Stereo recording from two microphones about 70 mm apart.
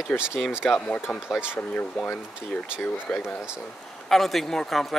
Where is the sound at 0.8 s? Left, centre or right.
Centre.